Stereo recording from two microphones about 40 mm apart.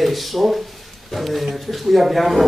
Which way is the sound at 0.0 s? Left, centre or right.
Centre.